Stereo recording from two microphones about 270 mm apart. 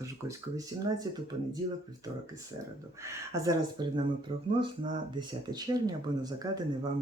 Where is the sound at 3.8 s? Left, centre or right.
Centre.